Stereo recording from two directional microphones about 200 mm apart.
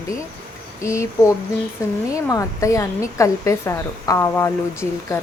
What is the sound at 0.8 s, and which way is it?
Speech, 15° left (ahead or behind).